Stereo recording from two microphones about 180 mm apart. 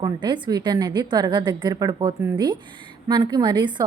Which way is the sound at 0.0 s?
25° right (ahead or behind).